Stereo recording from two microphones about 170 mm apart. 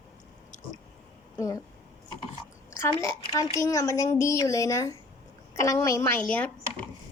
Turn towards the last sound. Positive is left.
turn(degrees=10)  # may be behind; listen again after turning